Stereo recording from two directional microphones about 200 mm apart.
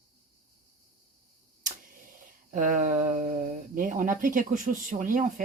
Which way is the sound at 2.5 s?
40° right (ahead or behind).